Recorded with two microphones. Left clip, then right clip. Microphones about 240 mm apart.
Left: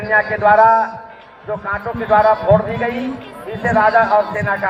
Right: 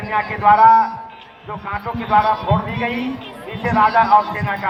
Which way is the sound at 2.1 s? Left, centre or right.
Right.